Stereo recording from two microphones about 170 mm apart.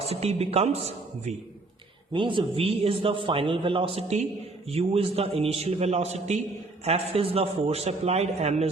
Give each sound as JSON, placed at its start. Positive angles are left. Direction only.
{"t": 0.0, "sound": "a man's voice", "side_deg": -35}